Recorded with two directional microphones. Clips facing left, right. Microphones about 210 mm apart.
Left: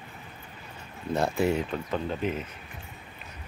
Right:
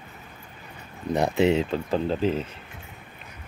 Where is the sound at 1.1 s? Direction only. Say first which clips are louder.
Right 4 dB; 20° right (ahead or behind).